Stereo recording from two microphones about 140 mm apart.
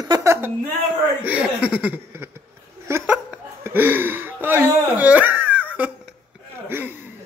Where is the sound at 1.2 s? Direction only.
10° right (ahead or behind).